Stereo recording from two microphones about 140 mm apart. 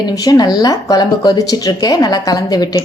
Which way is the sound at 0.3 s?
30° left (ahead or behind).